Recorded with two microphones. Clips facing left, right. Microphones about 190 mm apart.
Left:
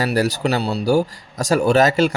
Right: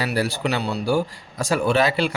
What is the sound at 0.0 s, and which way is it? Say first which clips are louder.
Speech: left 4 dB; 40° left (ahead or behind).